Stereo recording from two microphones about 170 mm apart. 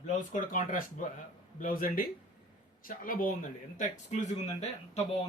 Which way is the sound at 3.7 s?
45° left (ahead or behind).